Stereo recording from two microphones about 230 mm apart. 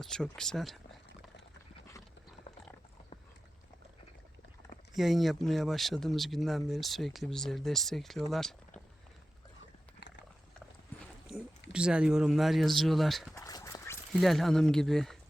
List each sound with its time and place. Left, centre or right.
0.0 s speech: centre
4.9 s speech: centre
10.0 s horse: left
11.7 s speech: centre
13.3 s duck: centre
14.1 s speech: centre